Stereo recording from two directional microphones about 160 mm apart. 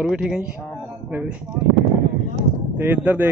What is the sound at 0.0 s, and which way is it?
Speech, centre (ahead or behind).